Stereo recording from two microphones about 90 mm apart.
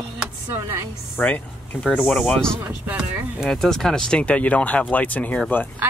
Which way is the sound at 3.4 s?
5° left (ahead or behind).